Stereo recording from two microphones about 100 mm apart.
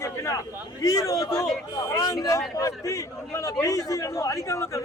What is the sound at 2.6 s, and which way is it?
A man's voice, 35° left (ahead or behind).